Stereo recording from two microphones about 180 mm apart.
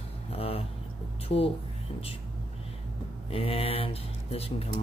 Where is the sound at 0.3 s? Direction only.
35° left (ahead or behind).